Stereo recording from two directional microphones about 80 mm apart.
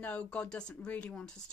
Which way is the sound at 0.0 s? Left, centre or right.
Centre.